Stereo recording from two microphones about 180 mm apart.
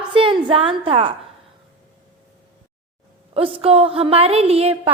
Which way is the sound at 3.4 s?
30° right (ahead or behind).